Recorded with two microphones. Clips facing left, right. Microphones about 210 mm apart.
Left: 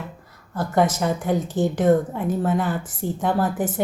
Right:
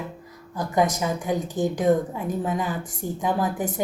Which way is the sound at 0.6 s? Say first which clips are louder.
Left 2 dB; 15° right (ahead or behind).